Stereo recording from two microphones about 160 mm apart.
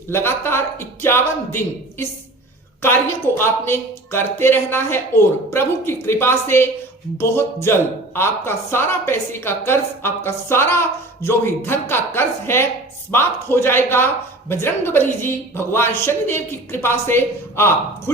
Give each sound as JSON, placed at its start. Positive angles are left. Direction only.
{"t": 0.1, "sound": "speech", "side_deg": 15}